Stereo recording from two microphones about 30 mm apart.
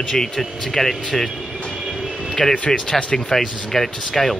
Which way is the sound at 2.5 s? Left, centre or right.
Left.